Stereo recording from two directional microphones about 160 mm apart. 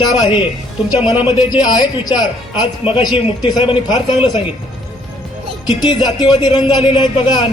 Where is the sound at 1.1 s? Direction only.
35° left (ahead or behind).